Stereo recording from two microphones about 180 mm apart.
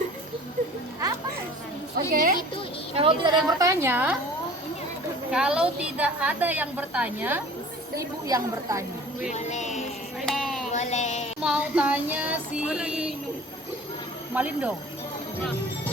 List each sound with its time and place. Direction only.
2.1 s speech: 50° right (ahead or behind)
2.9 s a woman's voice: 30° right (ahead or behind); by 4.1 s 10° right (ahead or behind)
5.3 s a woman's voice: 5° right (ahead or behind)
9.3 s speech: 40° left (ahead or behind)
10.2 s music: centre (ahead or behind)
10.7 s music: 40° left (ahead or behind)
11.4 s a woman's voice: 5° right (ahead or behind)
14.3 s a woman's voice: 10° right (ahead or behind)